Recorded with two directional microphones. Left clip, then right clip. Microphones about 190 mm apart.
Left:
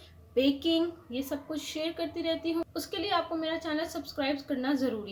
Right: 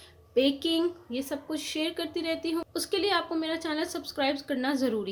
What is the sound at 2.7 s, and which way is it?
A woman's voice, 35° right (ahead or behind).